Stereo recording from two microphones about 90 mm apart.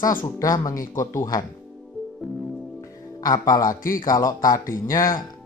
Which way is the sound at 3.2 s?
40° left (ahead or behind).